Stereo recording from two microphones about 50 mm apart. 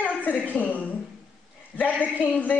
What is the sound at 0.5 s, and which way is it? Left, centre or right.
A man's voice, left.